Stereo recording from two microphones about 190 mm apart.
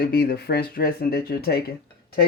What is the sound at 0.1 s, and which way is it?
Speech, 60° left (ahead or behind).